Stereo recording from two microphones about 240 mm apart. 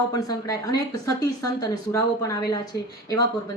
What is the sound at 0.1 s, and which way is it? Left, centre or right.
Speech, centre.